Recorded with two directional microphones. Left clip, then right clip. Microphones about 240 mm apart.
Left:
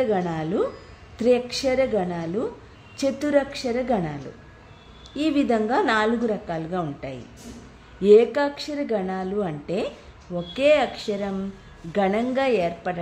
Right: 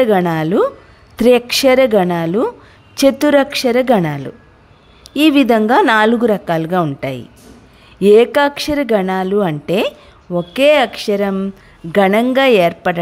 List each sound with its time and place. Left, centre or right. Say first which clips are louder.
0.0 s a woman's voice: right 11 dB; right